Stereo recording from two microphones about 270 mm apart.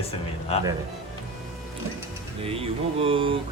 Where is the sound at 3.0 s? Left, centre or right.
Centre.